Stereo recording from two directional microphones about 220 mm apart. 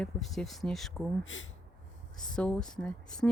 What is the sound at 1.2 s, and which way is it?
Speech, 60° left (ahead or behind).